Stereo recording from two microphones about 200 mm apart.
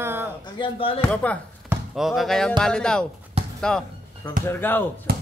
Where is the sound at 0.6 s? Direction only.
25° left (ahead or behind).